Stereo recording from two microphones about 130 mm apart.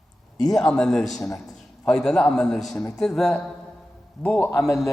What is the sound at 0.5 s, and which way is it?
A man's voice, 5° left (ahead or behind).